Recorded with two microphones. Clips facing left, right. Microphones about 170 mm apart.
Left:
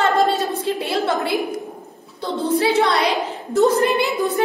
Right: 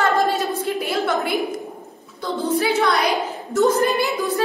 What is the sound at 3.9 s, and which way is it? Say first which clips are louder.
Speech: left 1 dB; 20° left (ahead or behind).